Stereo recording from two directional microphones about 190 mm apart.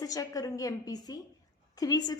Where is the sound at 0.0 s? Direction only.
20° left (ahead or behind).